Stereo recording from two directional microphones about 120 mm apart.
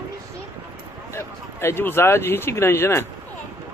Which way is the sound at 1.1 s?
20° left (ahead or behind).